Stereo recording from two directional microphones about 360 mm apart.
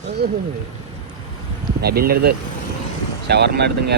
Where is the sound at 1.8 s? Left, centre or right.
Right.